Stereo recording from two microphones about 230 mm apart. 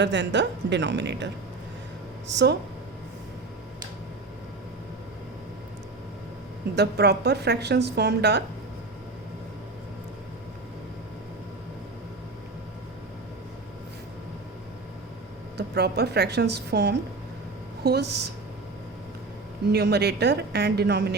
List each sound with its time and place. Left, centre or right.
0.0 s a woman's voice: right
2.3 s a woman's voice: right
6.7 s a woman's voice: right
15.5 s a woman's voice: right
19.6 s a woman's voice: right